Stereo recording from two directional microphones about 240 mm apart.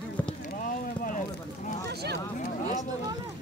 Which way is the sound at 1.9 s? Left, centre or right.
Right.